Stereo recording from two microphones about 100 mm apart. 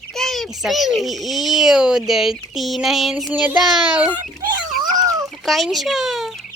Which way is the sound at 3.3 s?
15° right (ahead or behind).